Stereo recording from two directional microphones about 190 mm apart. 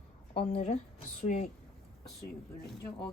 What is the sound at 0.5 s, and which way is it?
Speech, 35° left (ahead or behind).